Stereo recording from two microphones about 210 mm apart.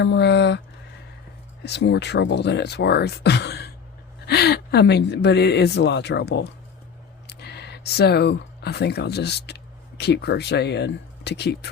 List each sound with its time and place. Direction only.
0.0 s speech: 55° left (ahead or behind)
1.6 s speech: 50° left (ahead or behind)